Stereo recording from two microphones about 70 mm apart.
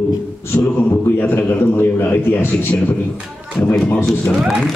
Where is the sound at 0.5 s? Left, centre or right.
Left.